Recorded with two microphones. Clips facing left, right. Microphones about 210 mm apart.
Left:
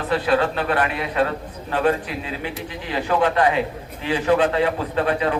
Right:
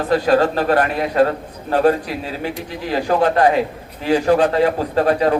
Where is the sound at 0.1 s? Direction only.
40° right (ahead or behind).